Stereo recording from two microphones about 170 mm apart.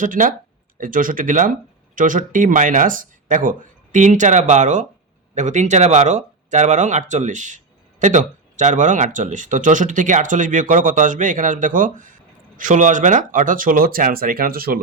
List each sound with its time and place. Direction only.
0.0 s speech: 50° right (ahead or behind)